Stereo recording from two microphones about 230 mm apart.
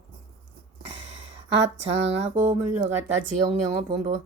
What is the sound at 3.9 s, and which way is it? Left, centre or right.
Speech, right.